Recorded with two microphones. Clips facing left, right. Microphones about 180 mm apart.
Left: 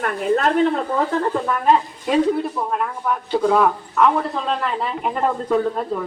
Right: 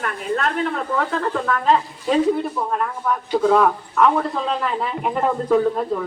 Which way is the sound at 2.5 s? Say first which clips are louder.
Even; 5° left (ahead or behind).